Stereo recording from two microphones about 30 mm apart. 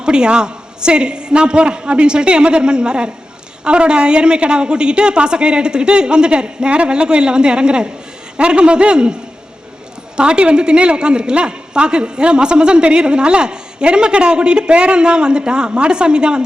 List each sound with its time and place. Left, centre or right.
0.0 s a woman's voice: right
10.2 s a woman's voice: right